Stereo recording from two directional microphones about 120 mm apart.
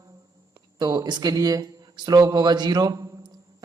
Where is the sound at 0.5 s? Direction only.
35° right (ahead or behind).